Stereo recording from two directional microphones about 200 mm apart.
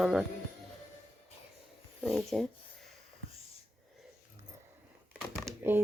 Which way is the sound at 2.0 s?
Centre (ahead or behind).